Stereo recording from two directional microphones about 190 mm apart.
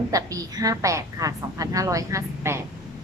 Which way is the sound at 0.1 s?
20° right (ahead or behind).